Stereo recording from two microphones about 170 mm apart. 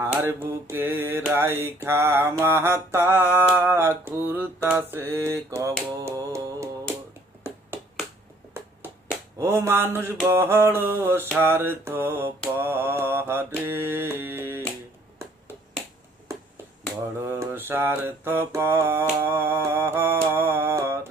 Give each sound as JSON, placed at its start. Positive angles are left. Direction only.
{"t": 0.0, "sound": "mantra", "side_deg": -10}
{"t": 6.0, "sound": "music", "side_deg": -20}
{"t": 7.7, "sound": "finger snapping", "side_deg": -10}
{"t": 9.4, "sound": "mantra", "side_deg": -15}
{"t": 17.2, "sound": "mantra", "side_deg": -15}